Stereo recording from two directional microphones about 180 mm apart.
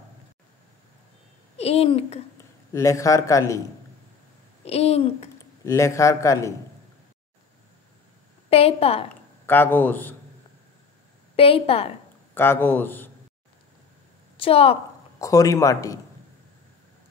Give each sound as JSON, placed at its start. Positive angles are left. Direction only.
{"t": 1.6, "sound": "speech", "side_deg": 35}
{"t": 2.3, "sound": "a man's voice", "side_deg": 15}
{"t": 4.6, "sound": "a child's voice", "side_deg": 35}
{"t": 5.7, "sound": "a man's voice", "side_deg": 15}
{"t": 8.5, "sound": "a child's voice", "side_deg": 35}
{"t": 9.1, "sound": "a man's voice", "side_deg": 10}
{"t": 11.3, "sound": "a child's voice", "side_deg": 30}
{"t": 12.4, "sound": "a man's voice", "side_deg": 10}
{"t": 14.3, "sound": "a woman's voice", "side_deg": 30}
{"t": 15.1, "sound": "a man's voice", "side_deg": 20}